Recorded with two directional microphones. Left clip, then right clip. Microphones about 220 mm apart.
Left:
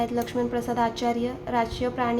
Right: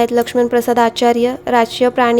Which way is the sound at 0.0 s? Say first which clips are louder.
Right 13 dB; 50° right (ahead or behind).